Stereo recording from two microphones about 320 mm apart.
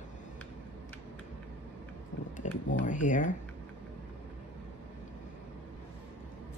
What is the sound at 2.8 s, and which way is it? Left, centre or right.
Speech, left.